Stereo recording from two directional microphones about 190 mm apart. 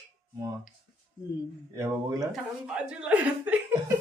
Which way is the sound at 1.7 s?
15° right (ahead or behind).